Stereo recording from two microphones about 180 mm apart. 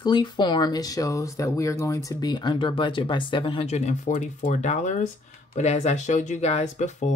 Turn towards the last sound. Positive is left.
turn(degrees=40)  # may be behind; listen again after turning